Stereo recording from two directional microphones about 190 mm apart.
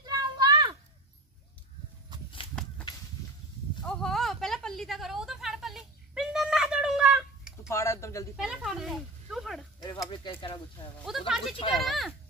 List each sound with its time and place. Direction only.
0.0 s children playing: 20° right (ahead or behind)
2.6 s a sound: 5° left (ahead or behind)
3.8 s a sound: 5° left (ahead or behind)
7.7 s speech: 15° left (ahead or behind)
8.4 s speech: 5° right (ahead or behind)
10.0 s speech: 25° left (ahead or behind)
11.1 s speech: centre (ahead or behind)